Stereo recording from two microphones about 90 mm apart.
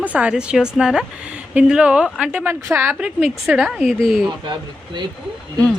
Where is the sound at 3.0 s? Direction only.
10° right (ahead or behind).